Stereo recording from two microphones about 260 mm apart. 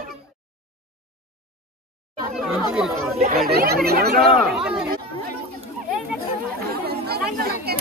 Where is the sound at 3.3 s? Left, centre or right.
Right.